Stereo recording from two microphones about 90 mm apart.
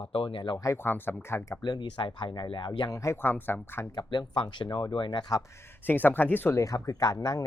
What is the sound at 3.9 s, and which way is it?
Speech, 60° left (ahead or behind).